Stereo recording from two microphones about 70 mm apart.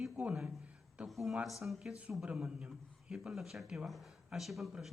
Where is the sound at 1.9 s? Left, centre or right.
Centre.